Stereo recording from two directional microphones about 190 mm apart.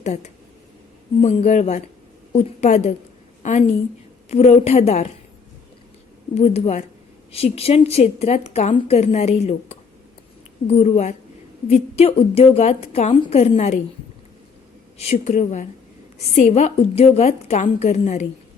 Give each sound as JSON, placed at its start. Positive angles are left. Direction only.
{"t": 0.0, "sound": "a woman's voice", "side_deg": 35}
{"t": 6.3, "sound": "a woman's voice", "side_deg": 35}
{"t": 10.8, "sound": "a woman's voice", "side_deg": 35}
{"t": 14.9, "sound": "a woman's voice", "side_deg": 35}